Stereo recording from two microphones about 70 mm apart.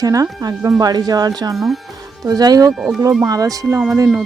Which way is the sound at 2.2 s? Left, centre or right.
Right.